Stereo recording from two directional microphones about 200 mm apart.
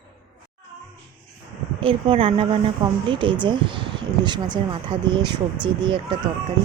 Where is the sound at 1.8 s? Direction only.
25° right (ahead or behind).